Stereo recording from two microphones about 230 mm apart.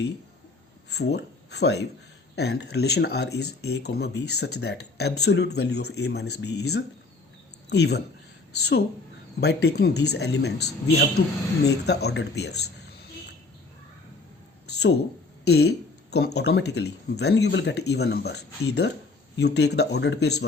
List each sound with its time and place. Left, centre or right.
0.9 s speech: left
7.7 s speech: left
14.7 s a sound: left
15.4 s speech: left